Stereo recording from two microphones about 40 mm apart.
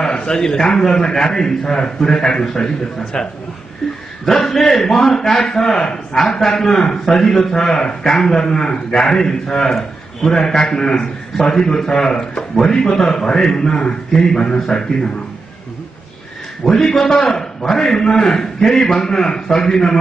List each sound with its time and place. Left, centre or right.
0.1 s a man's voice: left
4.5 s a man's voice: centre
5.3 s a man's voice: left
16.6 s a man's voice: centre